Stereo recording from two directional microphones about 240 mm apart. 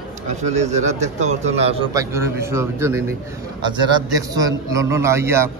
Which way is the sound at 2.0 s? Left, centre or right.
Centre.